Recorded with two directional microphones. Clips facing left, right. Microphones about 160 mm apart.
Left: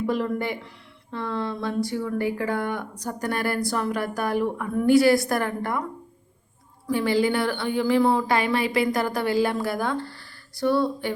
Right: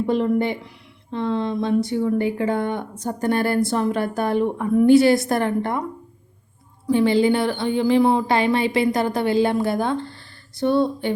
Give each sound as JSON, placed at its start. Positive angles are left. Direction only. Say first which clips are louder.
{"t": 0.0, "sound": "speech", "louder": "right 5 dB", "side_deg": -25}
{"t": 6.9, "sound": "speech", "louder": "right 5 dB", "side_deg": -25}